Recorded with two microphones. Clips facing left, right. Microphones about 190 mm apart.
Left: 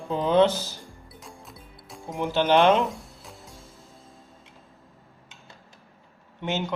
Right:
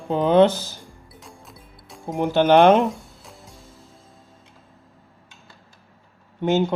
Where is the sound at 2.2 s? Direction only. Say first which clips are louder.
Right 5 dB; 50° right (ahead or behind).